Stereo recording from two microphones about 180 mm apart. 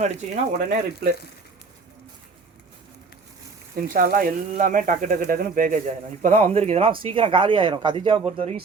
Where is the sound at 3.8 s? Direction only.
55° right (ahead or behind).